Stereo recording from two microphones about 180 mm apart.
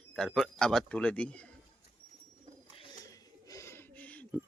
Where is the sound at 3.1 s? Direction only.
15° left (ahead or behind).